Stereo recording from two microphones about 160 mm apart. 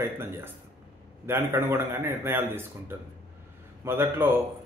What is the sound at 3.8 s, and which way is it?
Speech, 15° right (ahead or behind).